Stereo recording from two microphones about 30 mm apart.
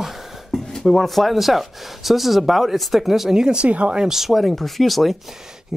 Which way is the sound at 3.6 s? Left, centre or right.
Right.